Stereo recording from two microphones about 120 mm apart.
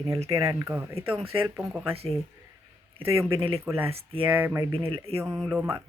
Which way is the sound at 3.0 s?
20° right (ahead or behind).